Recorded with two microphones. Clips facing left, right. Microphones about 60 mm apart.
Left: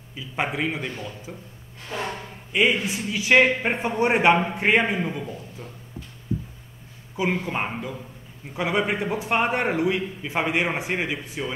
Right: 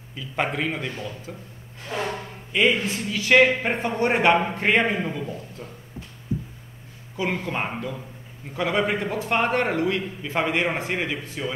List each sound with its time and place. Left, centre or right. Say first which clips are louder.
0.1 s a man's voice: right 1 dB; centre
1.9 s a sound: right 2 dB; right
2.5 s a man's voice: even; centre
7.4 s a man's voice: even; centre